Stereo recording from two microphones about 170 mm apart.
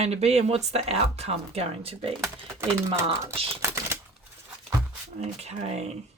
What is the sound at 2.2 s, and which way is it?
Speech, 15° right (ahead or behind).